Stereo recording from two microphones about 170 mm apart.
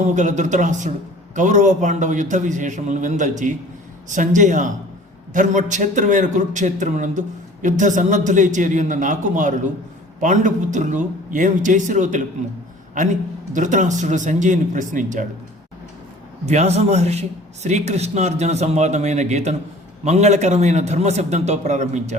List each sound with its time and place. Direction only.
0.0 s a man's voice: 45° right (ahead or behind)
13.5 s a man's voice: 45° right (ahead or behind)
16.5 s a man's voice: 40° right (ahead or behind)